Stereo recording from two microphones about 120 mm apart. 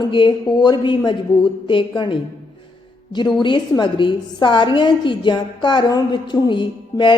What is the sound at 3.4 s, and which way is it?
A woman's voice, 40° left (ahead or behind).